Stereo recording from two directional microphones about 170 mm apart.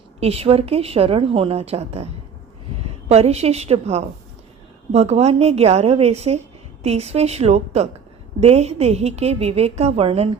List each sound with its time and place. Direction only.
0.2 s a woman's voice: 35° right (ahead or behind)
3.1 s a woman's voice: 40° right (ahead or behind)